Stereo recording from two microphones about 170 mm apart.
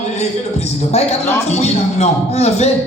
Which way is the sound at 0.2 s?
40° left (ahead or behind).